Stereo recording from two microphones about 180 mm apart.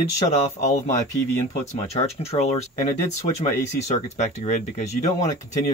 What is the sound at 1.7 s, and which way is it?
Speech, 35° left (ahead or behind).